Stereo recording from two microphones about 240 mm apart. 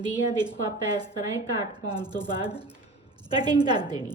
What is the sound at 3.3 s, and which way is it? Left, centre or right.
Speech, centre.